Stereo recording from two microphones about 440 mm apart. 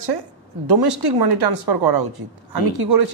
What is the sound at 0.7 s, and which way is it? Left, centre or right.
A woman's voice, right.